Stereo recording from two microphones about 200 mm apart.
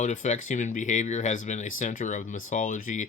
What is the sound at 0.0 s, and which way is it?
Speech, 35° left (ahead or behind).